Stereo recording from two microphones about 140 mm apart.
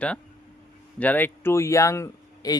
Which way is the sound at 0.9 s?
10° left (ahead or behind).